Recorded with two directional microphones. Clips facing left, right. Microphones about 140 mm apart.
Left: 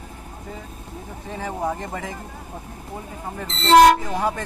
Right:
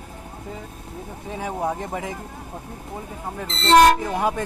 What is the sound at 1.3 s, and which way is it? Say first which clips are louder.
Speech: even; 10° right (ahead or behind).